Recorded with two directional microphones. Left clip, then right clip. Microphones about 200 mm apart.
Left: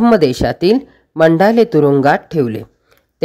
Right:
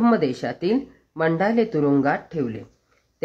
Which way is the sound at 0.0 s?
45° left (ahead or behind).